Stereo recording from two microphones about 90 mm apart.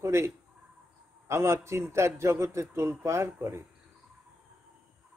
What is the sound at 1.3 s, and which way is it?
A man's voice, 30° right (ahead or behind).